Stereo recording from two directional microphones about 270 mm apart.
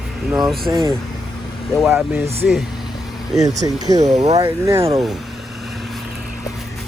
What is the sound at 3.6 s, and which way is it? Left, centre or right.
Speech, centre.